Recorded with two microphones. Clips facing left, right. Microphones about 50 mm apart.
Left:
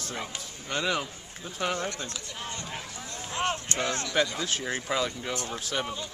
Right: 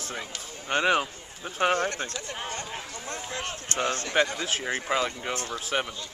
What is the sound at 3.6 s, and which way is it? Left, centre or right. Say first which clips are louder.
Speech: right 2 dB; right.